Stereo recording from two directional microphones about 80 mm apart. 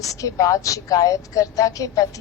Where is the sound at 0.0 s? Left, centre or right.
Left.